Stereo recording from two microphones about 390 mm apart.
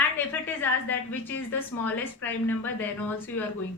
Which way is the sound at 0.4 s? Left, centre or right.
Centre.